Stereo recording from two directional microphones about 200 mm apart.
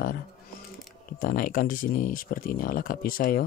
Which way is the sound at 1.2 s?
45° left (ahead or behind).